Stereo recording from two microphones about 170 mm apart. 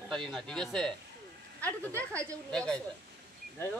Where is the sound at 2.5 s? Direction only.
5° left (ahead or behind).